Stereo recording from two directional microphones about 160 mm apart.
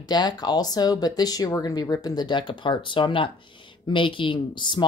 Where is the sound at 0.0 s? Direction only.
25° left (ahead or behind).